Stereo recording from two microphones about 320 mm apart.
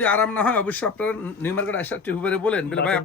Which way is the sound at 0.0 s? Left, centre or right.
Centre.